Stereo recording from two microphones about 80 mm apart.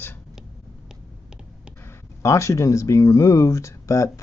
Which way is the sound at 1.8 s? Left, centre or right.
Left.